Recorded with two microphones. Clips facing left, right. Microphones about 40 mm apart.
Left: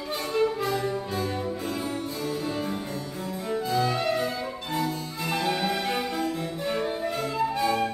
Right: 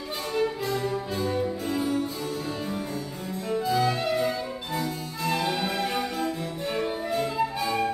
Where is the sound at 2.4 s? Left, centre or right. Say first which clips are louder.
Left 2 dB; centre.